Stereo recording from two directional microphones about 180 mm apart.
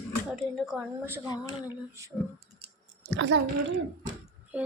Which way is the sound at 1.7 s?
15° right (ahead or behind).